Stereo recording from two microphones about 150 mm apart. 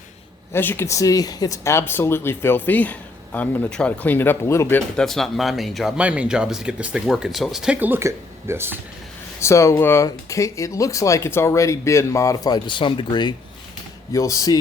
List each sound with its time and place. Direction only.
0.5 s a man's voice: 15° left (ahead or behind)
4.9 s speech: centre (ahead or behind); by 8.8 s 15° right (ahead or behind)
9.4 s speech: 20° left (ahead or behind)